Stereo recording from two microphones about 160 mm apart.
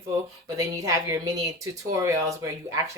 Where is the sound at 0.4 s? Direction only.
20° right (ahead or behind).